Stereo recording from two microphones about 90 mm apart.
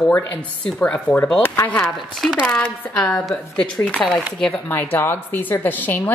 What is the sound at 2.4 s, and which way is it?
Speech, 10° left (ahead or behind).